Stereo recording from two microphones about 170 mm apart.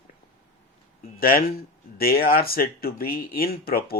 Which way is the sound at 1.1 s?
60° left (ahead or behind).